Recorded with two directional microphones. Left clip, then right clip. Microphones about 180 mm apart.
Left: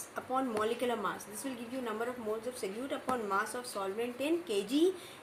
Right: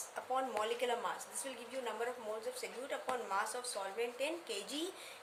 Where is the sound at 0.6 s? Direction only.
20° right (ahead or behind).